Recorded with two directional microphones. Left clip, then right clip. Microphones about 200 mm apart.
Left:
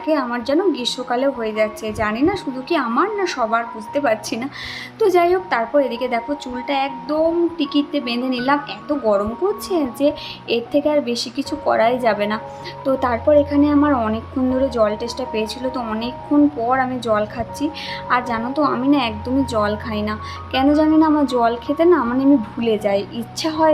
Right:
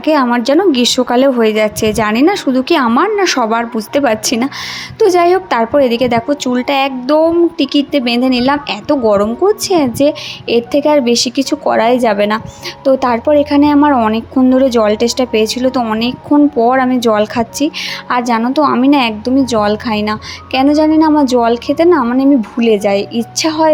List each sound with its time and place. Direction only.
0.0 s a woman's voice: 40° right (ahead or behind)